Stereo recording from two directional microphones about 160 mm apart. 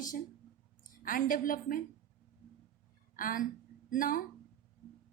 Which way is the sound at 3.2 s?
60° left (ahead or behind).